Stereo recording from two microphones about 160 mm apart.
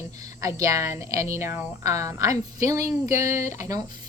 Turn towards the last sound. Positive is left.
turn(degrees=-20)  # may be behind; listen again after turning